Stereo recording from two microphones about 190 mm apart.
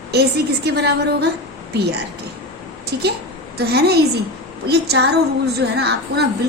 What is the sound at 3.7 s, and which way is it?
A woman's voice, 60° right (ahead or behind).